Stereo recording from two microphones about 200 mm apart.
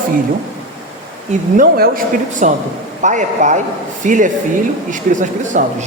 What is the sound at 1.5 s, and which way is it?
A man's voice, 45° right (ahead or behind).